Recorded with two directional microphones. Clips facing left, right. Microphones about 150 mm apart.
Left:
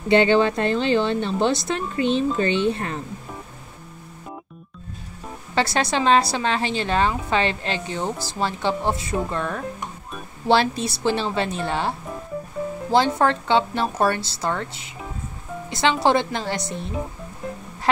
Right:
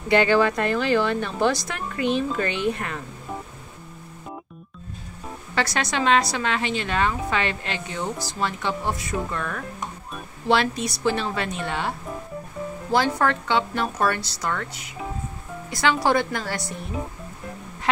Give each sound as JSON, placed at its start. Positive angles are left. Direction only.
{"t": 0.1, "sound": "speech", "side_deg": 25}
{"t": 5.5, "sound": "a woman's voice", "side_deg": 30}
{"t": 13.2, "sound": "speech", "side_deg": 30}